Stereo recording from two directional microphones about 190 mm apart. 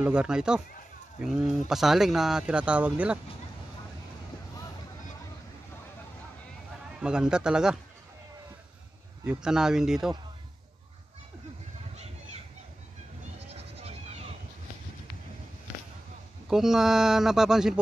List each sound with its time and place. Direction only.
0.0 s speech: 5° right (ahead or behind)
7.0 s speech: 5° right (ahead or behind)
9.2 s speech: 5° right (ahead or behind)
13.5 s goat: 35° right (ahead or behind)
16.4 s speech: centre (ahead or behind)